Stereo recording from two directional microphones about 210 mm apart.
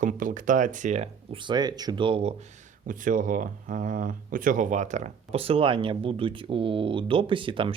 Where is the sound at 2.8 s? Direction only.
40° right (ahead or behind).